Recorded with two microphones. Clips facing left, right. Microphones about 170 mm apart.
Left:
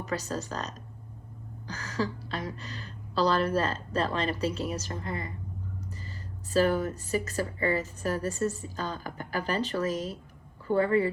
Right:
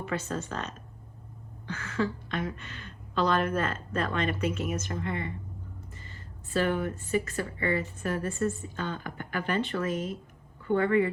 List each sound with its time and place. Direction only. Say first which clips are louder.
0.0 s speech: even; 40° left (ahead or behind)